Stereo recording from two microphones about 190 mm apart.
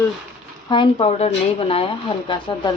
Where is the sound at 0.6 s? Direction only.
25° left (ahead or behind).